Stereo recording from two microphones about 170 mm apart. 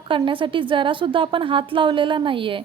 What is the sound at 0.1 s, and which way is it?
A woman's voice, 30° right (ahead or behind).